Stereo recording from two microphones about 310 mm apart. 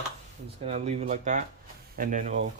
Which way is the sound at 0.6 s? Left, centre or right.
Centre.